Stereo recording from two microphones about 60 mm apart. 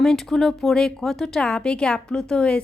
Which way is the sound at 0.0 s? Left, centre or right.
Centre.